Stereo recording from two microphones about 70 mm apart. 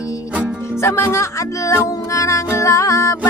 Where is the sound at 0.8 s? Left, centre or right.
Left.